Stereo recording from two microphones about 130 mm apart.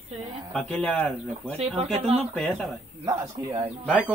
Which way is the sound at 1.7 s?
50° right (ahead or behind).